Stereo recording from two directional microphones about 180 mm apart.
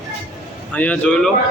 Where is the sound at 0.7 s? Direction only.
5° left (ahead or behind).